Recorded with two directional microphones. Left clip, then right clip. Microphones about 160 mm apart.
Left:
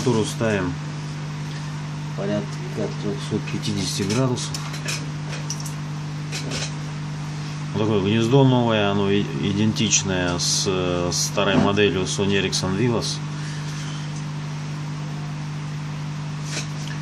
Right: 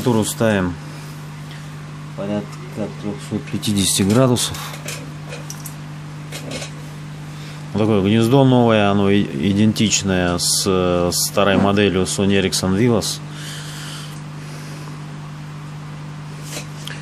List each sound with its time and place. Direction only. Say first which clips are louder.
0.4 s speech: right 5 dB; 60° right (ahead or behind)
3.6 s speech: right 11 dB; 60° right (ahead or behind)
7.7 s speech: right 4 dB; 35° right (ahead or behind)